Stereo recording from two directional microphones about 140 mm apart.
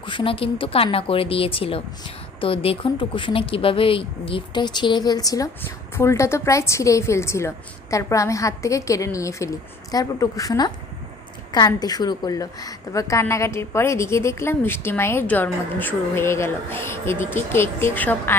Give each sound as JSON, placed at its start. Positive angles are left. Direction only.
{"t": 0.0, "sound": "a woman's voice", "side_deg": 35}